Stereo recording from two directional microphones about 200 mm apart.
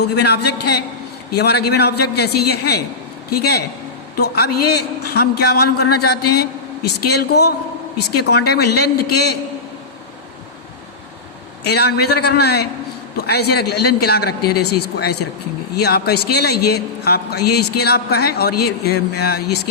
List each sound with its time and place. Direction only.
0.0 s a man's voice: 55° left (ahead or behind)
11.7 s a man's voice: 55° left (ahead or behind)